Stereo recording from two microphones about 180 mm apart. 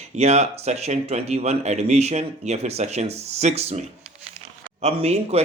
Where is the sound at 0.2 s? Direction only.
35° right (ahead or behind).